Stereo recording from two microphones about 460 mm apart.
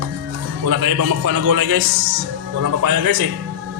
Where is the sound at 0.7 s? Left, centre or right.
Right.